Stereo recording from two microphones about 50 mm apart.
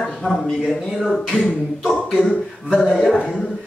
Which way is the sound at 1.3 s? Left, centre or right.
Left.